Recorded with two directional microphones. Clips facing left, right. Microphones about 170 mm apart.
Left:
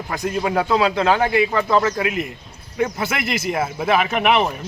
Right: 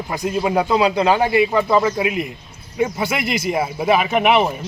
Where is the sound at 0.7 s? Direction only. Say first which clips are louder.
Right 1 dB; 5° right (ahead or behind).